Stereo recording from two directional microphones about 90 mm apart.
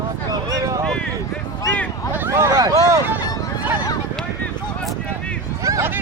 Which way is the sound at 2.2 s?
30° right (ahead or behind).